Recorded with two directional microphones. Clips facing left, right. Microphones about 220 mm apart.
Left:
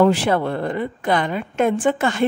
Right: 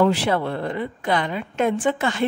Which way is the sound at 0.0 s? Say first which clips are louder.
Left 3 dB; 50° left (ahead or behind).